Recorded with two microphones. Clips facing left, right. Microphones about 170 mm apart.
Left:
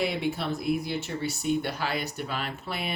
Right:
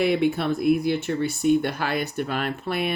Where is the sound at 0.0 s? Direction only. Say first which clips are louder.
Right 7 dB; 55° right (ahead or behind).